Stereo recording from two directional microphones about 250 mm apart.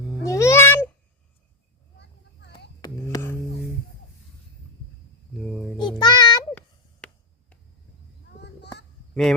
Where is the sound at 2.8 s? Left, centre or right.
Centre.